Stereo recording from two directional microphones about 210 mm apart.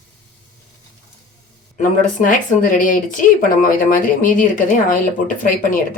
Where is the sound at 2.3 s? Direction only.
40° left (ahead or behind).